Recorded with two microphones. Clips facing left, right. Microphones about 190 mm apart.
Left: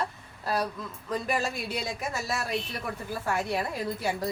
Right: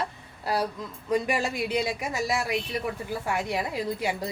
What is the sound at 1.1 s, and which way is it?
Speech, 15° right (ahead or behind).